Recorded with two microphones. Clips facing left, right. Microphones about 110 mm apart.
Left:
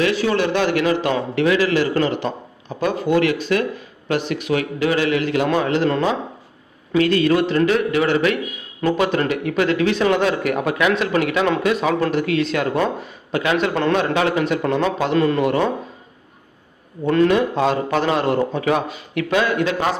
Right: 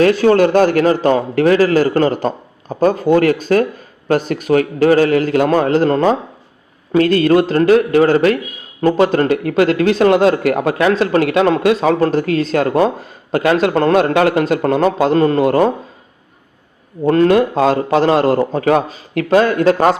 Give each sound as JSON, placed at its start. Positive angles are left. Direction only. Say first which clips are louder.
{"t": 0.0, "sound": "a man's voice", "louder": "right 8 dB", "side_deg": -45}
{"t": 14.1, "sound": "a man's voice", "louder": "right 6 dB", "side_deg": -55}
{"t": 14.4, "sound": "speech", "louder": "right 5 dB", "side_deg": -40}
{"t": 17.0, "sound": "speech", "louder": "right 5 dB", "side_deg": -40}